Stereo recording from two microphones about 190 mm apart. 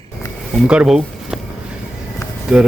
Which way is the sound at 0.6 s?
5° right (ahead or behind).